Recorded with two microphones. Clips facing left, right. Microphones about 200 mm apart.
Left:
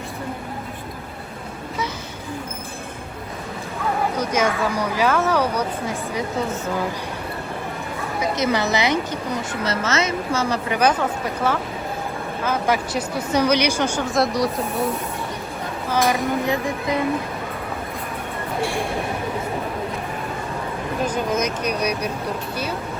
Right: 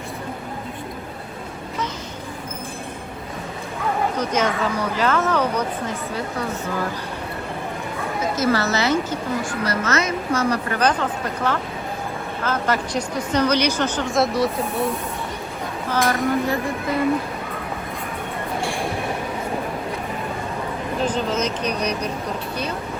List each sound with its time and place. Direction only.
4.2 s speech: 10° left (ahead or behind)
8.4 s speech: 20° left (ahead or behind)
9.5 s speech: 25° left (ahead or behind)
10.7 s speech: 10° left (ahead or behind)
14.1 s speech: centre (ahead or behind)
15.9 s speech: 10° left (ahead or behind)
21.0 s speech: 10° left (ahead or behind)